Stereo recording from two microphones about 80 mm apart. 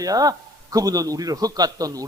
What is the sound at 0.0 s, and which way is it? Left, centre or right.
A man's voice, right.